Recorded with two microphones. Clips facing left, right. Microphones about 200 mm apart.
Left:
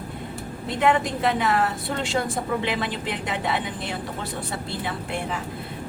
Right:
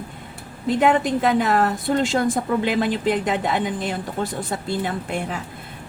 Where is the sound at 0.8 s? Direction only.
45° right (ahead or behind).